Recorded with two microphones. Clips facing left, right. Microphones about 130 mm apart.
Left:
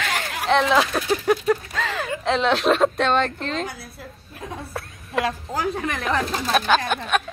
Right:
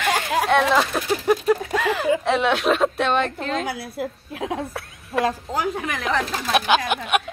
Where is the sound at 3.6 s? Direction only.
75° right (ahead or behind).